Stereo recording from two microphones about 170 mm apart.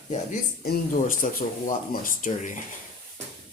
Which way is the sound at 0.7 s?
55° left (ahead or behind).